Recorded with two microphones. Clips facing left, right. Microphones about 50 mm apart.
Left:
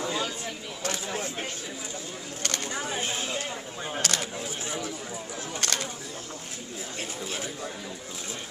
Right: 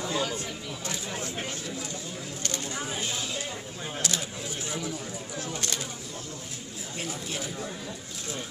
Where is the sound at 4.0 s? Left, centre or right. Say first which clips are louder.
Left 3 dB; left.